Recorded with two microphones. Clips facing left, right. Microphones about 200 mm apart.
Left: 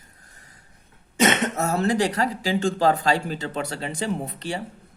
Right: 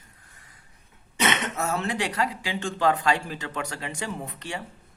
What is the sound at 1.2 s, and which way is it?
Speech, 45° left (ahead or behind).